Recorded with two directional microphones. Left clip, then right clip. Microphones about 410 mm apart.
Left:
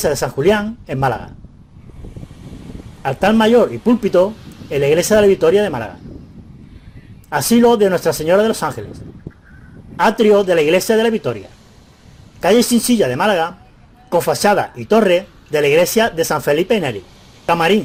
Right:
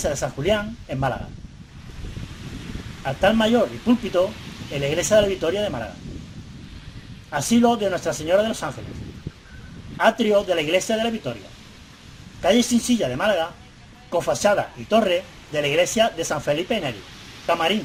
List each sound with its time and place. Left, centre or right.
0.0 s speech: left
3.0 s speech: left
7.3 s speech: left
9.3 s a sound: left
10.0 s speech: left
12.4 s speech: left